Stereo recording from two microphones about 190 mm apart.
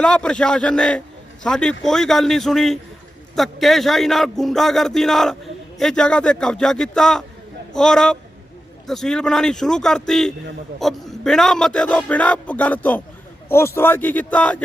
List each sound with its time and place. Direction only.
0.0 s a man's voice: 5° left (ahead or behind)